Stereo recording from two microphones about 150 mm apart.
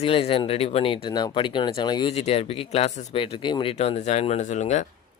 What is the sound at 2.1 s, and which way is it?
Speech, 45° left (ahead or behind).